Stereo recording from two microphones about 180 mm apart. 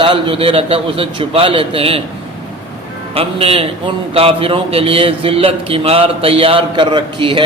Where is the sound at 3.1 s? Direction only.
35° right (ahead or behind).